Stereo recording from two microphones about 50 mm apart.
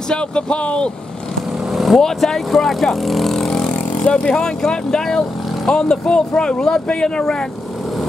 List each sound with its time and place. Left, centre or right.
0.1 s speech: left
1.7 s vehicle: centre
2.0 s speech: centre